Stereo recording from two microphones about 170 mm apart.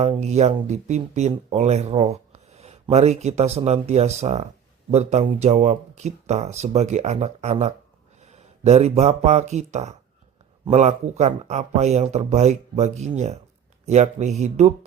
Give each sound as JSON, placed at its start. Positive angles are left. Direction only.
{"t": 0.0, "sound": "speech", "side_deg": -40}